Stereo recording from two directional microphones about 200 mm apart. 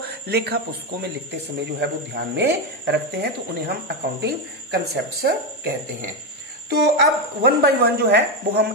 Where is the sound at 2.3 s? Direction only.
55° right (ahead or behind).